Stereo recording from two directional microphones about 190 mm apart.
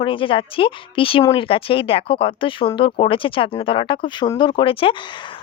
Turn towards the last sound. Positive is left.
turn(degrees=30)  # may be behind; listen again after turning